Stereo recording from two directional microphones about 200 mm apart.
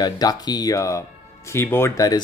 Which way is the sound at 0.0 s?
20° left (ahead or behind).